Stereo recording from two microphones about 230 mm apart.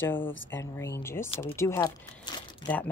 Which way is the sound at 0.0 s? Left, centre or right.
Centre.